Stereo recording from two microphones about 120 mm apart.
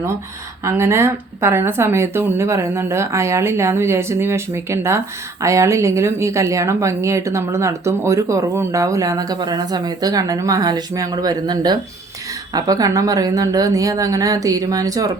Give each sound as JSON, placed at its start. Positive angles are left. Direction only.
{"t": 0.6, "sound": "a woman's voice", "side_deg": -25}